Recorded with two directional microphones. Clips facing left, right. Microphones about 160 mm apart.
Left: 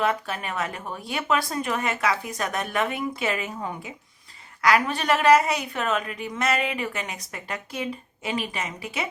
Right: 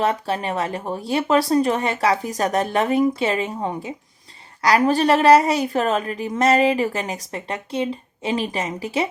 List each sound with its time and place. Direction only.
0.0 s a woman's voice: 35° right (ahead or behind)